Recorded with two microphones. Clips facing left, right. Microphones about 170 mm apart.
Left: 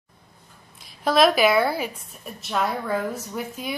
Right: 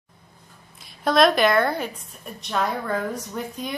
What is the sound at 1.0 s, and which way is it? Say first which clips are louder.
A woman's voice: even; 5° left (ahead or behind).